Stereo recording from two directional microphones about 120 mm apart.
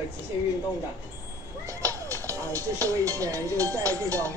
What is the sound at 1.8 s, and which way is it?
Music, 25° right (ahead or behind).